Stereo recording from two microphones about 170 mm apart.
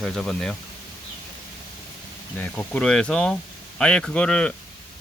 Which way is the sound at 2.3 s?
10° left (ahead or behind).